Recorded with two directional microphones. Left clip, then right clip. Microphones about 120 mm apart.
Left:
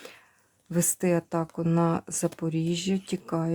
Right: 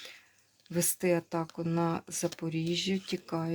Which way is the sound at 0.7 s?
65° left (ahead or behind).